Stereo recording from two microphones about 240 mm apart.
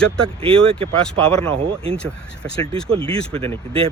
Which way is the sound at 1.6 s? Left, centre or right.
Right.